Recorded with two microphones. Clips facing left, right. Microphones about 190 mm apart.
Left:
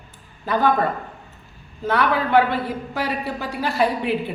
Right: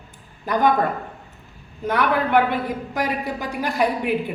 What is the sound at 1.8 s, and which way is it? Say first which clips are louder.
A man's voice: even; 15° right (ahead or behind).